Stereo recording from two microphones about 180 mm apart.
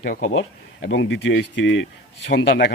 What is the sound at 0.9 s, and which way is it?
Speech, 80° left.